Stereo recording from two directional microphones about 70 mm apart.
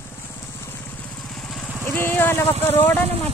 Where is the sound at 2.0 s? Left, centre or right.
Left.